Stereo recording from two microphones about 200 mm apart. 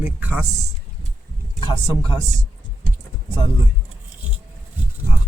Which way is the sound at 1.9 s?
20° right (ahead or behind).